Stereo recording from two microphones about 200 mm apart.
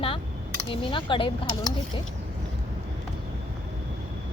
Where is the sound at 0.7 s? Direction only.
25° left (ahead or behind).